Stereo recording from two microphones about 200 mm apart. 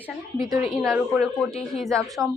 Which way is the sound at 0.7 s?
Centre (ahead or behind).